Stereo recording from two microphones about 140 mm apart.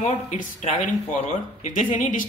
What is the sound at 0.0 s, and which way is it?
Speech, 55° left (ahead or behind).